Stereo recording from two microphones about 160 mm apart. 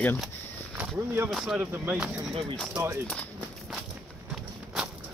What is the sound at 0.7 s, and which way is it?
Speech, 15° right (ahead or behind).